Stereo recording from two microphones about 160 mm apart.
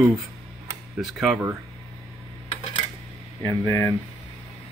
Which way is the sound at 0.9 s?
Centre (ahead or behind).